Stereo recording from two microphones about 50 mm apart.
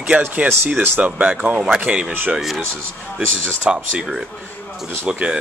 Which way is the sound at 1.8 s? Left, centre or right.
Right.